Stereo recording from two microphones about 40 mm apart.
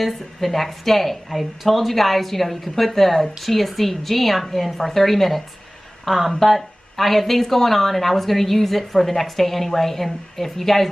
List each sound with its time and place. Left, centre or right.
0.0 s speech: centre